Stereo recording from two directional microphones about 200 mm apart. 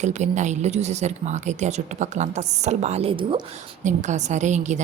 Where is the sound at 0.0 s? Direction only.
35° right (ahead or behind).